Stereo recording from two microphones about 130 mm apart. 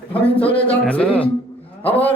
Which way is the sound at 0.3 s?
45° left (ahead or behind).